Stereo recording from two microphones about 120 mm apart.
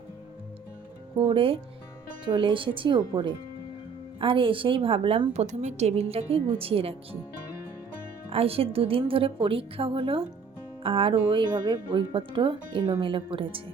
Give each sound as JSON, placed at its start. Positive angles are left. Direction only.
{"t": 1.1, "sound": "speech", "side_deg": -45}
{"t": 8.3, "sound": "speech", "side_deg": -55}